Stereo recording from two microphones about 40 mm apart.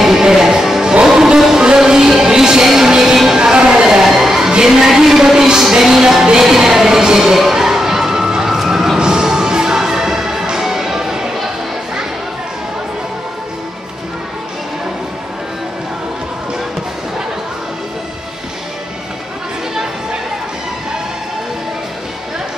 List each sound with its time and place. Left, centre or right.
0.0 s music: centre
7.5 s crowd: centre
8.5 s a sound: centre
9.0 s music: centre